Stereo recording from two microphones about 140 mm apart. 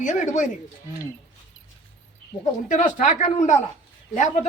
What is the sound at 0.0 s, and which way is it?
Speech, 65° left (ahead or behind).